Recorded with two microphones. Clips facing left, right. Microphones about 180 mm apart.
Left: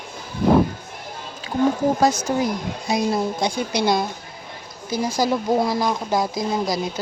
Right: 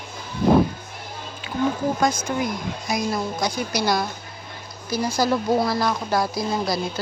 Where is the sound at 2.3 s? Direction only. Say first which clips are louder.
Left 3 dB; 35° left (ahead or behind).